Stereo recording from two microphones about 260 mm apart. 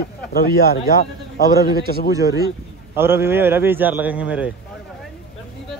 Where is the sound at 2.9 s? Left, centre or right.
Centre.